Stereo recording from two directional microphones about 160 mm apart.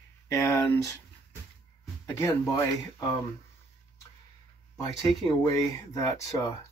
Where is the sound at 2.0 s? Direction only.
20° left (ahead or behind).